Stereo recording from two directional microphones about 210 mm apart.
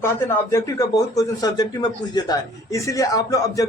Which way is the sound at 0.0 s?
10° left (ahead or behind).